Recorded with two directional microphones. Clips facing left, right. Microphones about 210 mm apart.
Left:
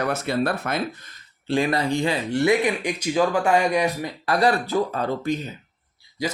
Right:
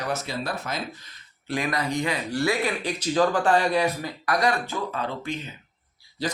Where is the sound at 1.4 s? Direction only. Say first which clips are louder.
Left 5 dB; 30° left (ahead or behind).